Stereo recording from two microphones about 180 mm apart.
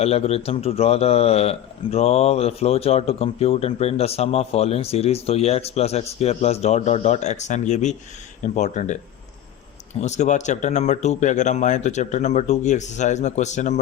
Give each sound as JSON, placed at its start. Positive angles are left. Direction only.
{"t": 0.0, "sound": "a man's voice", "side_deg": 35}
{"t": 10.0, "sound": "a man's voice", "side_deg": 40}